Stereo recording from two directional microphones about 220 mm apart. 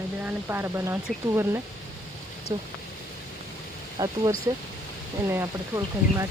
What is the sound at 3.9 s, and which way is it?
Speech, 15° right (ahead or behind).